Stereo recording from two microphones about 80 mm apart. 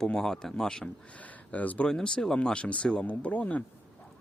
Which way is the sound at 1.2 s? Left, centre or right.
Centre.